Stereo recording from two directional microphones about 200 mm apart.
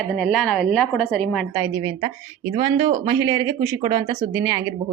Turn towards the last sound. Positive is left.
turn(degrees=-15)  # may be behind; listen again after turning